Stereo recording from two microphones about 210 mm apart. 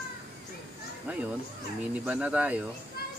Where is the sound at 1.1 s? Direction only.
5° right (ahead or behind).